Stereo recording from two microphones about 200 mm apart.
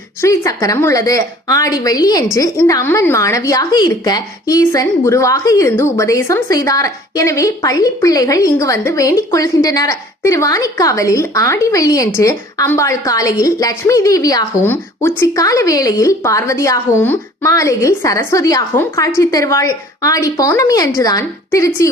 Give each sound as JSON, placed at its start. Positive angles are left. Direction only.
{"t": 0.2, "sound": "a woman's voice", "side_deg": 15}